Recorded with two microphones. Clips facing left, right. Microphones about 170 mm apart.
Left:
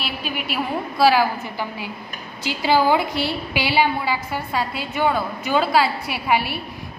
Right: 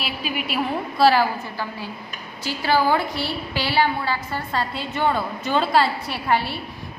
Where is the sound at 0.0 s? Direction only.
Centre (ahead or behind).